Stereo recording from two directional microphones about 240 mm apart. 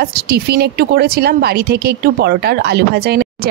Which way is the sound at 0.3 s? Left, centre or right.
Right.